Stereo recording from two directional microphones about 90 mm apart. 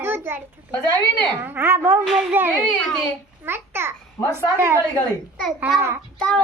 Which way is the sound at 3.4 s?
25° right (ahead or behind).